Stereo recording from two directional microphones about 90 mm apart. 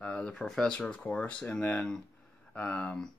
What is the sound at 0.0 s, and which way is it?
Speech, 15° left (ahead or behind).